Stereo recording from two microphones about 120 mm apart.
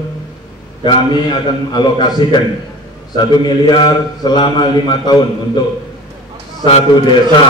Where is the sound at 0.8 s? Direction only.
40° left (ahead or behind).